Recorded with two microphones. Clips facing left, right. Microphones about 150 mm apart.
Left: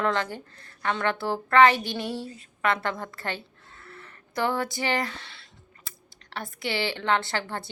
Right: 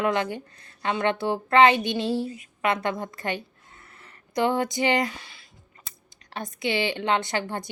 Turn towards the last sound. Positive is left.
turn(degrees=-15)  # may be behind; listen again after turning